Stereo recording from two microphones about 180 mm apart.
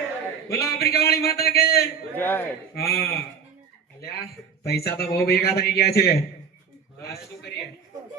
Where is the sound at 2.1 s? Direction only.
10° left (ahead or behind).